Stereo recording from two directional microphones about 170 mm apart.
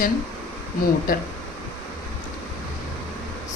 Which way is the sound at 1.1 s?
55° left (ahead or behind).